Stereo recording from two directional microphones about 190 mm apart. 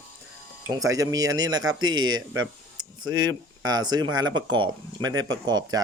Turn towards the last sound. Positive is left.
turn(degrees=-20)  # may be behind; listen again after turning